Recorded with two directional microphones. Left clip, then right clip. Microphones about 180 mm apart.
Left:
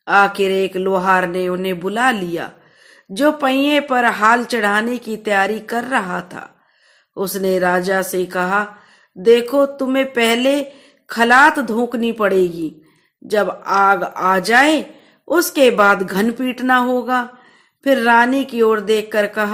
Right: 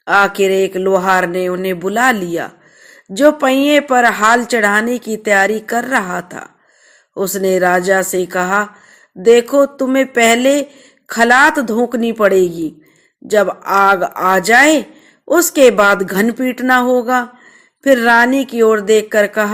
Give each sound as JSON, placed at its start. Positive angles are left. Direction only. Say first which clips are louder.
{"t": 0.0, "sound": "a woman's voice", "louder": "right 2 dB", "side_deg": -20}